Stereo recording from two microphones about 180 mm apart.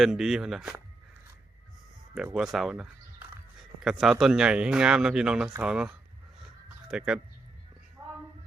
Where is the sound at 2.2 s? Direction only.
5° right (ahead or behind).